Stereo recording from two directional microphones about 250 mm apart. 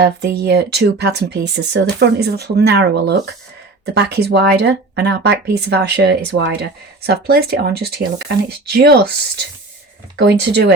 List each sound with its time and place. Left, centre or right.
0.0 s speech: right
10.2 s speech: right